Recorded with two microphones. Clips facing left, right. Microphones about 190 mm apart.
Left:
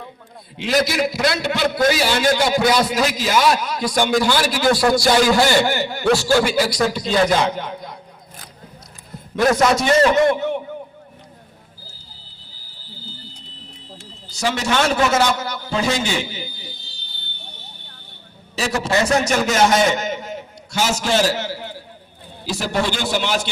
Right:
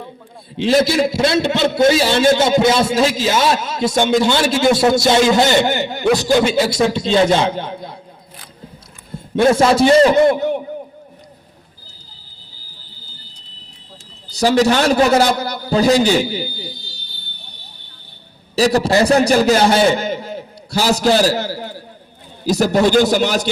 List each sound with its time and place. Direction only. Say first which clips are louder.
0.5 s a man's voice: right 5 dB; 30° right (ahead or behind)
9.1 s a man's voice: right 4 dB; 30° right (ahead or behind)
14.3 s a man's voice: right 8 dB; 35° right (ahead or behind)
18.5 s a man's voice: right 6 dB; 35° right (ahead or behind)